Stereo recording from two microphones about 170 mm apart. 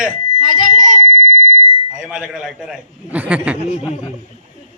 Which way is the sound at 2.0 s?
5° right (ahead or behind).